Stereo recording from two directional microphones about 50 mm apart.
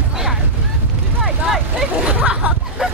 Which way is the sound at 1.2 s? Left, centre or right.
Centre.